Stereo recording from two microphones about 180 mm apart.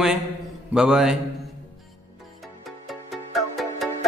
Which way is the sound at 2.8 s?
Centre (ahead or behind).